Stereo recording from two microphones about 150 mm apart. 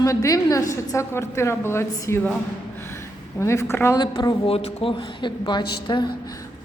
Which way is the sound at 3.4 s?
20° left (ahead or behind).